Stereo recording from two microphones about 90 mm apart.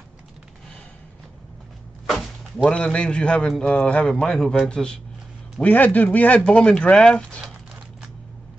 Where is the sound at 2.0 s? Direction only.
5° left (ahead or behind).